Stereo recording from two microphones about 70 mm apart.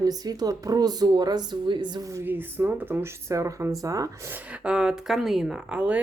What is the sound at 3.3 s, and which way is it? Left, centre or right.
Speech, right.